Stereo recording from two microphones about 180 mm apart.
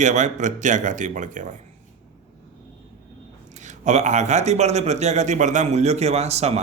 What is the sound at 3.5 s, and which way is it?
Speech, 40° right (ahead or behind).